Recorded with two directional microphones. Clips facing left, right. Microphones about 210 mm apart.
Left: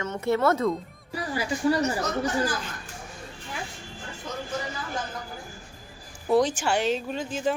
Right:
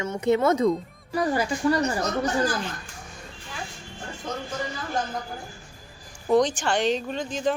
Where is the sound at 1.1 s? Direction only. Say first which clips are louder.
Right 8 dB; 45° right (ahead or behind).